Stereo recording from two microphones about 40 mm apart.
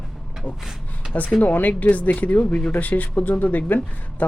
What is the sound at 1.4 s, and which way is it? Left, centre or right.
Speech, left.